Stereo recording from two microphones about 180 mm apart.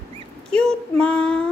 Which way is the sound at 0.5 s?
5° left (ahead or behind).